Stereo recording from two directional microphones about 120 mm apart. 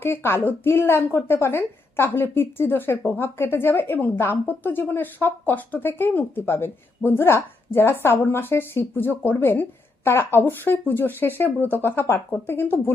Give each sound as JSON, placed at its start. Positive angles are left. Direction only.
{"t": 0.0, "sound": "a woman's voice", "side_deg": 20}